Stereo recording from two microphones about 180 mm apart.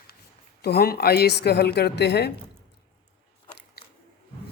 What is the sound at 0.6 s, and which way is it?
A woman's voice, 60° left (ahead or behind).